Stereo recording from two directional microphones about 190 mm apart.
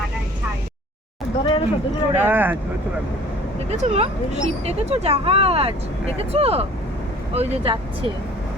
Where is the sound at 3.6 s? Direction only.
35° right (ahead or behind).